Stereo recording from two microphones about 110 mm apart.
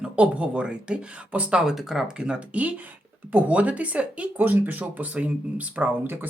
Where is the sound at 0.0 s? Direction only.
10° right (ahead or behind).